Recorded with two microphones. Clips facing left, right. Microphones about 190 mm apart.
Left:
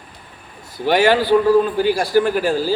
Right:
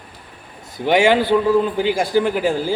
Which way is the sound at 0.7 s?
20° right (ahead or behind).